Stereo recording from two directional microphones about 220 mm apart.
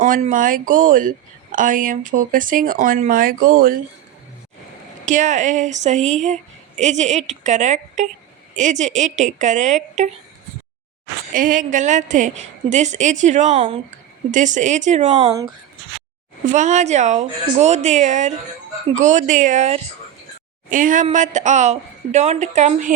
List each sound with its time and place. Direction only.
0.0 s speech: 35° right (ahead or behind)
5.0 s speech: 35° right (ahead or behind)
11.3 s speech: 35° right (ahead or behind)
14.3 s speech: 35° right (ahead or behind)
16.5 s speech: 30° right (ahead or behind)